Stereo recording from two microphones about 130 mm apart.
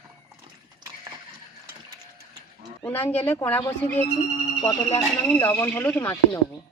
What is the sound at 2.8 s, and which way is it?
Speech, 15° left (ahead or behind).